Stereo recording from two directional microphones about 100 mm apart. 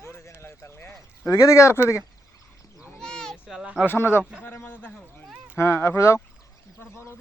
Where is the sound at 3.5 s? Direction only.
10° right (ahead or behind).